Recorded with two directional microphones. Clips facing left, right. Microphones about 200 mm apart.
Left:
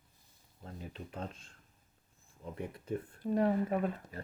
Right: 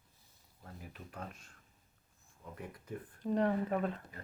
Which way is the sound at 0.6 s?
25° left (ahead or behind).